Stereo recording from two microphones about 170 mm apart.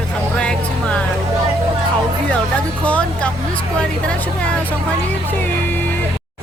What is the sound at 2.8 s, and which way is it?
Speech, 10° left (ahead or behind).